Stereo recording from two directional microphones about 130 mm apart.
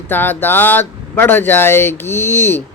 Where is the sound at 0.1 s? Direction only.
15° left (ahead or behind).